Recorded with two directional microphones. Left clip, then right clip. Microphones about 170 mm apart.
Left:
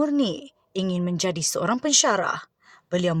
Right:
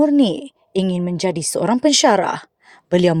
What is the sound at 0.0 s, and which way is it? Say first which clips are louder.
A woman's voice: right 8 dB; 25° right (ahead or behind).